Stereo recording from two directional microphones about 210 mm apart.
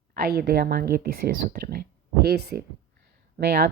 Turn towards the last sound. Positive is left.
turn(degrees=-50)  # may be behind; listen again after turning